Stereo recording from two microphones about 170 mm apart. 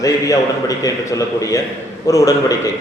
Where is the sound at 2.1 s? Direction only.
20° left (ahead or behind).